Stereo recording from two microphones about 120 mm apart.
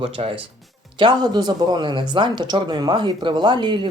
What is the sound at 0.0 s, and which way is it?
Speech, 45° right (ahead or behind).